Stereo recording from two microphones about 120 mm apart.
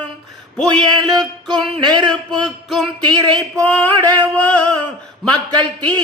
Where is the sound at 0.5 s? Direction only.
5° left (ahead or behind).